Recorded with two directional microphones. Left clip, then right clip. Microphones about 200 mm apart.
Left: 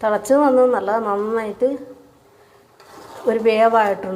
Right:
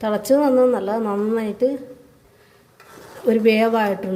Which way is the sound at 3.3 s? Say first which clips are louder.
Left 2 dB; 35° right (ahead or behind).